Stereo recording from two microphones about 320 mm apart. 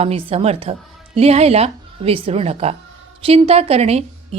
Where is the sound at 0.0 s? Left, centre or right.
Centre.